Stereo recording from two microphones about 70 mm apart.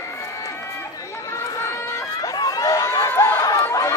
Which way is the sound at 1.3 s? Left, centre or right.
Left.